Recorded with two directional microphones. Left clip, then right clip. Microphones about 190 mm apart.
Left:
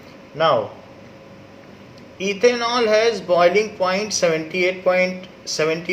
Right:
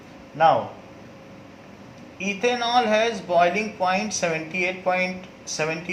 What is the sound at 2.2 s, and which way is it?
Speech, 50° left (ahead or behind).